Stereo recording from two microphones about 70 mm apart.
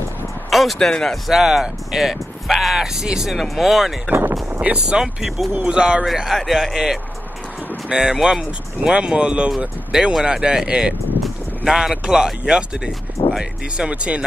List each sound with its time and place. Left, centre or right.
0.5 s speech: centre
4.6 s speech: centre
6.0 s speech: centre